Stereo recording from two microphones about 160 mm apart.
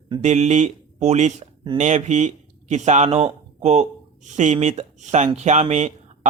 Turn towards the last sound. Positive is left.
turn(degrees=-45)  # may be behind; listen again after turning